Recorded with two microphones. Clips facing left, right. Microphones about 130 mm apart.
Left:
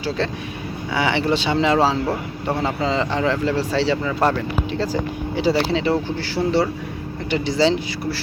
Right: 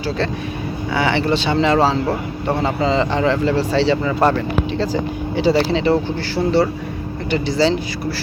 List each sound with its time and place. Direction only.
0.9 s speech: 15° left (ahead or behind)